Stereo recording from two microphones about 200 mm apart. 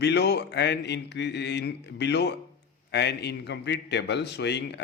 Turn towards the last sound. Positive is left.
turn(degrees=60)  # may be behind; listen again after turning